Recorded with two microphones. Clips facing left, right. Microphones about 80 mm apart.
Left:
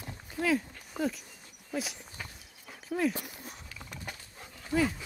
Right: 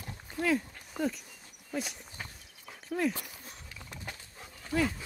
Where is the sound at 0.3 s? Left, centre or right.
Centre.